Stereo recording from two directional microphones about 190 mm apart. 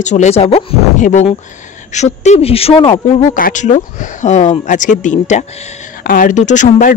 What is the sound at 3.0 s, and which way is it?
A woman's voice, 45° left (ahead or behind).